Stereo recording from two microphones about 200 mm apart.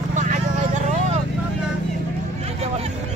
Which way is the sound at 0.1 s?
40° right (ahead or behind).